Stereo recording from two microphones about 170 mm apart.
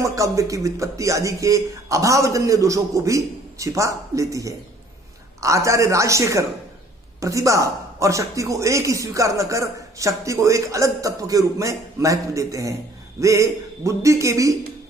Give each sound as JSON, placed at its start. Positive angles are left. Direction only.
{"t": 0.0, "sound": "a man's voice", "side_deg": -20}